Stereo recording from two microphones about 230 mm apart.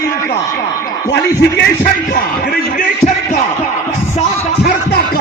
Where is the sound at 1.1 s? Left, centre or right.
Left.